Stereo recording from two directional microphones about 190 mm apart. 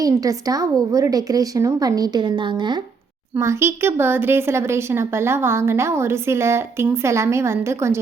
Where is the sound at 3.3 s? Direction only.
15° right (ahead or behind).